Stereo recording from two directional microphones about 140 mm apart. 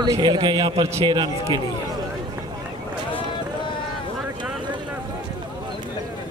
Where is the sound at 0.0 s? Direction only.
30° right (ahead or behind).